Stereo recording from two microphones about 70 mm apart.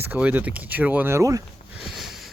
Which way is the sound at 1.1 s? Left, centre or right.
Right.